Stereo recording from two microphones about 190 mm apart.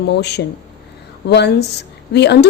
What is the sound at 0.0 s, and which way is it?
A woman's voice, 60° left (ahead or behind).